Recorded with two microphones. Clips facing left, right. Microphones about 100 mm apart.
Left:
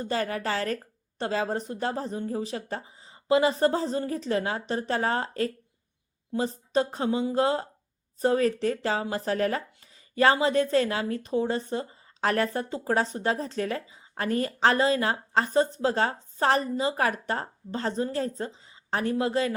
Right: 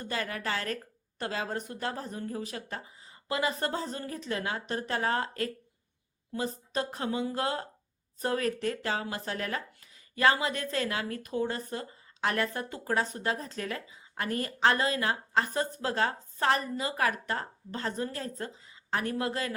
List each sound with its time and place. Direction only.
0.0 s a woman's voice: 30° left (ahead or behind)